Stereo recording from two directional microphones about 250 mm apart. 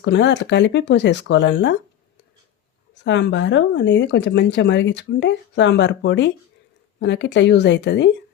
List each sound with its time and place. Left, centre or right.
0.0 s speech: left
3.0 s speech: left